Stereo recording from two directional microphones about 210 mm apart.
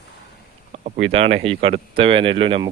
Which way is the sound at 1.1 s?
30° right (ahead or behind).